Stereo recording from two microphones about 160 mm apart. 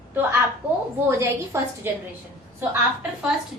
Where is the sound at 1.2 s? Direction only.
15° right (ahead or behind).